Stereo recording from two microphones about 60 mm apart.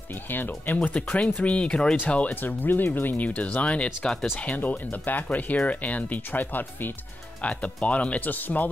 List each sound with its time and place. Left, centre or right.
0.1 s speech: left
1.0 s speech: left
7.4 s speech: left